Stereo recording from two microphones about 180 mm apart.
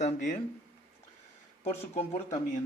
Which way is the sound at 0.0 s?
40° left (ahead or behind).